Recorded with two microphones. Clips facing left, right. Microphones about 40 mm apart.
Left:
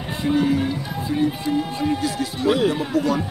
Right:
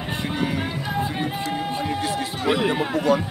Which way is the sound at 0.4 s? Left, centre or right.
Right.